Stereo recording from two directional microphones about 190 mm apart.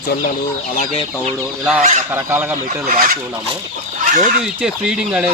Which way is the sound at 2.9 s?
45° right (ahead or behind).